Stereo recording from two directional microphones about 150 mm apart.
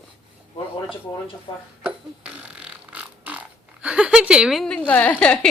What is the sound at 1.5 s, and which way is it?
Speech, 35° left (ahead or behind).